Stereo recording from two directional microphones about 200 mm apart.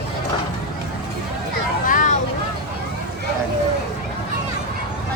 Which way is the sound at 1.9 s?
40° left (ahead or behind).